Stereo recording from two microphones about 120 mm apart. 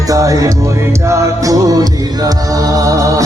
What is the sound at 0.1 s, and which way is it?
Music, 30° right (ahead or behind).